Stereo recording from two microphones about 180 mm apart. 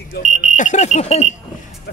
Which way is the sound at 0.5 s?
40° left (ahead or behind).